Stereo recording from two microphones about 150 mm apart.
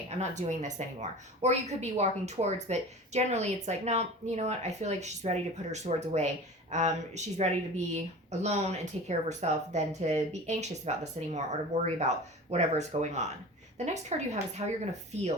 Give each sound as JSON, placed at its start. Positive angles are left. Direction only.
{"t": 0.2, "sound": "speech", "side_deg": -50}